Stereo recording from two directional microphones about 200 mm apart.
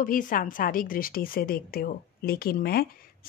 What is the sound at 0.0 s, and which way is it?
A woman's voice, 45° left (ahead or behind).